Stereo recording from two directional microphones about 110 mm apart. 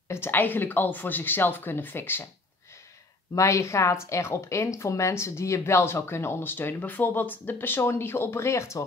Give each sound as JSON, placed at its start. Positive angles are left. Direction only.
{"t": 0.1, "sound": "speech", "side_deg": 20}
{"t": 3.3, "sound": "speech", "side_deg": 25}